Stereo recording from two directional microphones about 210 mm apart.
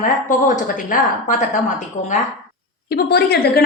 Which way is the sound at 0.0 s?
40° left (ahead or behind).